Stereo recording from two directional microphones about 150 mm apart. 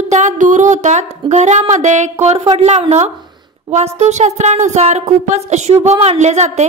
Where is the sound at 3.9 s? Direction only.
50° right (ahead or behind).